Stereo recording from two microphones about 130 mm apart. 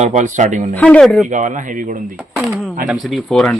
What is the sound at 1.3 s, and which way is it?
Speech, 70° right (ahead or behind).